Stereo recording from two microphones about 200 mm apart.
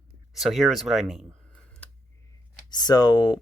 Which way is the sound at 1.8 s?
5° left (ahead or behind).